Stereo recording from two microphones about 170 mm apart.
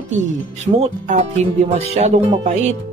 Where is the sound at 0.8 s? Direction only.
45° right (ahead or behind).